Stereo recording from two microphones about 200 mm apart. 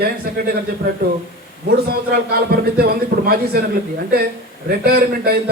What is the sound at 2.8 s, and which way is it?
Speech, 50° right (ahead or behind).